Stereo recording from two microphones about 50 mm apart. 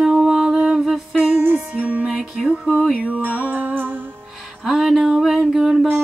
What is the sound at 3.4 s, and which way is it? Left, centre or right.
Music, right.